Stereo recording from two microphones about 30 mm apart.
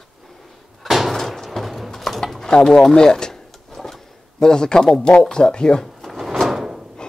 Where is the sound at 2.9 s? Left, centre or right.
Left.